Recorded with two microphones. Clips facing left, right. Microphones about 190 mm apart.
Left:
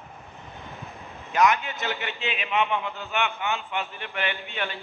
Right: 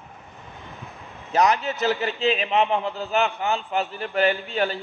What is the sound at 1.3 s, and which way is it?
A man's voice, 35° right (ahead or behind).